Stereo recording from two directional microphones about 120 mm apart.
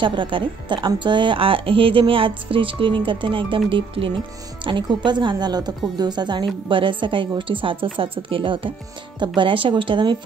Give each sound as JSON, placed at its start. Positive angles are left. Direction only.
{"t": 0.0, "sound": "speech", "side_deg": -45}